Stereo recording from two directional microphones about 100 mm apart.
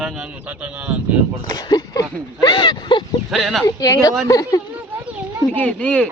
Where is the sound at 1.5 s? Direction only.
45° left (ahead or behind).